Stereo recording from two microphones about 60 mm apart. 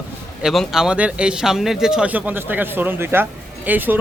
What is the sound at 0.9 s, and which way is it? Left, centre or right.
Speech, centre.